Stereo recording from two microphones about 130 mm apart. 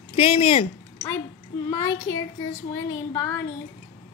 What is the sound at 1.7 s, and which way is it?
Speech, 25° left (ahead or behind).